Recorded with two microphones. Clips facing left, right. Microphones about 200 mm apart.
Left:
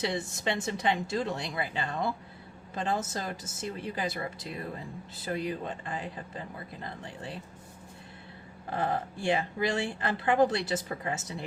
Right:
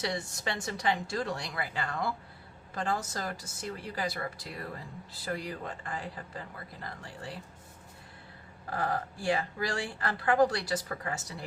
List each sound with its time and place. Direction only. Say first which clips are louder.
0.0 s speech: left 3 dB; 20° left (ahead or behind)
8.7 s speech: left 2 dB; 20° left (ahead or behind)